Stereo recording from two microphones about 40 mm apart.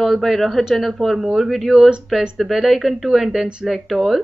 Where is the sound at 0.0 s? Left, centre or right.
Centre.